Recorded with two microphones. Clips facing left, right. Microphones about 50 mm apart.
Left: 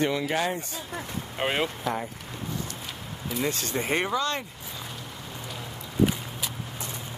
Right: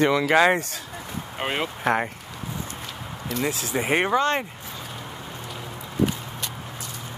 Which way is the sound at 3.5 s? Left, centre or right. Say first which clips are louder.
Right 3 dB; centre.